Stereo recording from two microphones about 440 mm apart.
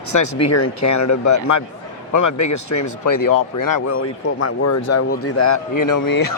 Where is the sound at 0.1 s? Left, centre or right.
Left.